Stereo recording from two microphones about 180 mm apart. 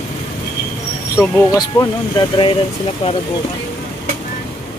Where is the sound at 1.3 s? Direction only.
20° left (ahead or behind).